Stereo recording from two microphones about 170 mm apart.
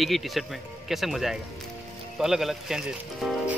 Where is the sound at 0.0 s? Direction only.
Centre (ahead or behind).